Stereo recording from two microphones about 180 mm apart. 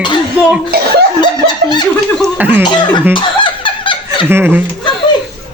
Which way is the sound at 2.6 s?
25° left (ahead or behind).